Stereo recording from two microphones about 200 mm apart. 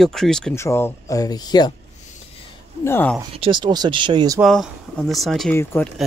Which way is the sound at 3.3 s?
25° right (ahead or behind).